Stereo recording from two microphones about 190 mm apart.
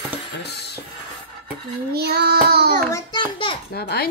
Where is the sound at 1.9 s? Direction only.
55° right (ahead or behind).